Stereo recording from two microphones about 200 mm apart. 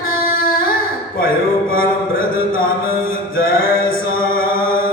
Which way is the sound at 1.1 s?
45° left (ahead or behind).